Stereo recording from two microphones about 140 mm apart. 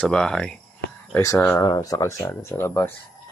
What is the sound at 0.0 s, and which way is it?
Speech, 5° left (ahead or behind).